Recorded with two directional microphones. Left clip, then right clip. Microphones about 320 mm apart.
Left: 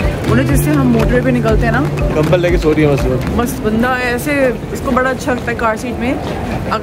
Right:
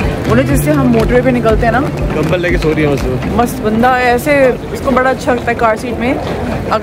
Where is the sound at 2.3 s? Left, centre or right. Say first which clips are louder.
Left 1 dB; centre.